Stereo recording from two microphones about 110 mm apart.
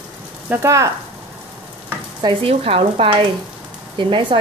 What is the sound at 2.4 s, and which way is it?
Speech, 60° right (ahead or behind).